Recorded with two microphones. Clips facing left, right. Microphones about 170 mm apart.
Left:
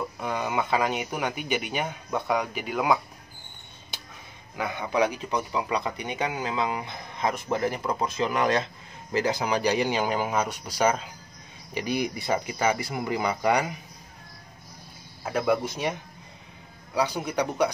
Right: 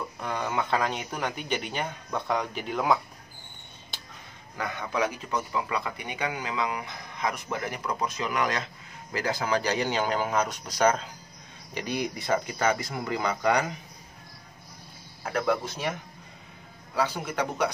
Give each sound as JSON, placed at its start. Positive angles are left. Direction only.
{"t": 0.2, "sound": "speech", "side_deg": 10}
{"t": 4.6, "sound": "a man's voice", "side_deg": 15}
{"t": 15.2, "sound": "speech", "side_deg": 10}
{"t": 16.9, "sound": "speech", "side_deg": 15}